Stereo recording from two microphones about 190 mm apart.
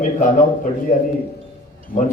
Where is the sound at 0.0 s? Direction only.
40° left (ahead or behind).